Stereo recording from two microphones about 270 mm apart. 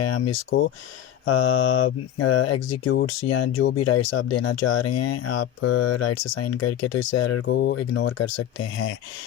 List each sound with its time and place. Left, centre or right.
0.0 s speech: left
1.2 s speech: left
3.2 s speech: left
3.8 s speech: left
4.8 s speech: left
6.3 s speech: left
7.5 s speech: left
8.2 s speech: left